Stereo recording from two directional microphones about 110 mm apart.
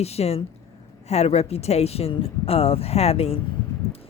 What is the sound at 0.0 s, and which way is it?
A woman's voice, 70° left (ahead or behind).